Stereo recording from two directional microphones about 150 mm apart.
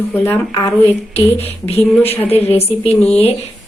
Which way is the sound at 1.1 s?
45° left (ahead or behind).